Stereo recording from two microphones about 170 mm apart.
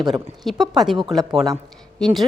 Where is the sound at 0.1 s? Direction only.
Centre (ahead or behind).